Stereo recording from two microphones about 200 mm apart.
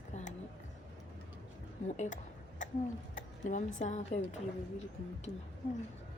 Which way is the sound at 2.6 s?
40° left (ahead or behind).